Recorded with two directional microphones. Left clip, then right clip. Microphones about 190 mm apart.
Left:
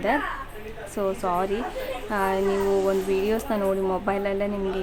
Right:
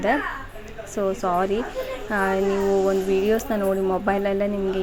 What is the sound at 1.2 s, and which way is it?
Speech, 10° right (ahead or behind).